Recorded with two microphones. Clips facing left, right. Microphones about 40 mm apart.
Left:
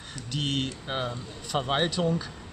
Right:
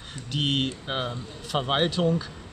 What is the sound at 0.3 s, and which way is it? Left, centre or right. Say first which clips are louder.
Speech: right 4 dB; centre.